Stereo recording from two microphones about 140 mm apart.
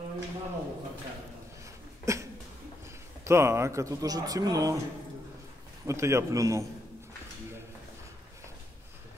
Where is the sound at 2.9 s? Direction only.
20° right (ahead or behind).